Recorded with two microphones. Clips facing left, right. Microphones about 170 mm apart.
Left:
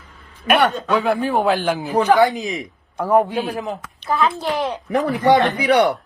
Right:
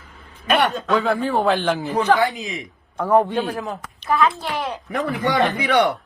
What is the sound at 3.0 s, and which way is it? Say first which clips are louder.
Speech: left 1 dB; 10° left (ahead or behind).